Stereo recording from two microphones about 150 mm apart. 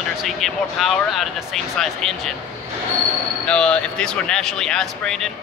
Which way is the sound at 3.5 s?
5° left (ahead or behind).